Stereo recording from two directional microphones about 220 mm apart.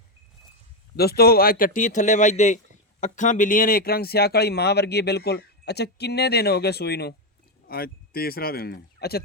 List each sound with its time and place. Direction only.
0.9 s a man's voice: 45° left (ahead or behind)